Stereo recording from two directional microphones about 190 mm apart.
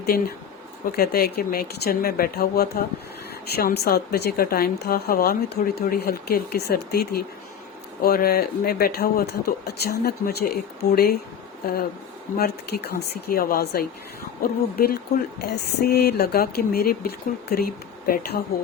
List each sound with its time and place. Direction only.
0.9 s a woman's voice: 50° left (ahead or behind)